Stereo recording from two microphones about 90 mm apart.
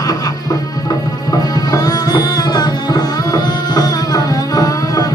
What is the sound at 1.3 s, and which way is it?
Music, 45° left (ahead or behind).